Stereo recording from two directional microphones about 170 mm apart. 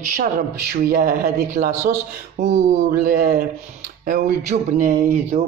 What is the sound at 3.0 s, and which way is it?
A man's voice, 60° right (ahead or behind).